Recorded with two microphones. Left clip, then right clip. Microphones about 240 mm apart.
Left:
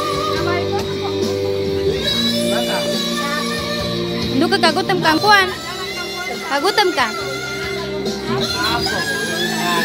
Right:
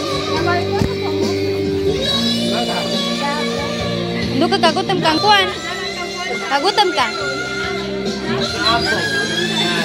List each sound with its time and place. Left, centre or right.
4.4 s speech: centre
6.5 s speech: centre